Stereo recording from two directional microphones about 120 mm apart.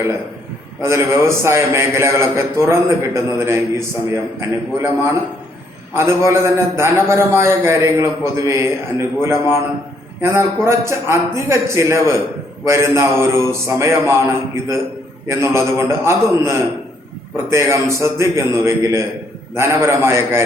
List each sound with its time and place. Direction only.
0.9 s a man's voice: 20° right (ahead or behind)
5.9 s a man's voice: 20° right (ahead or behind)